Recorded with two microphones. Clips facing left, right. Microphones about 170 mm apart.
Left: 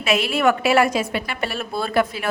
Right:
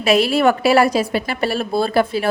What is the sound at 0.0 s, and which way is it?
A woman's voice, 35° right (ahead or behind).